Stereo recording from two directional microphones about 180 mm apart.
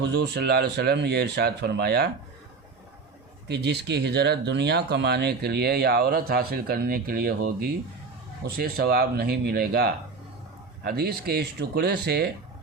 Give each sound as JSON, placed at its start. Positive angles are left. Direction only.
{"t": 0.0, "sound": "speech", "side_deg": -70}
{"t": 3.5, "sound": "speech", "side_deg": -70}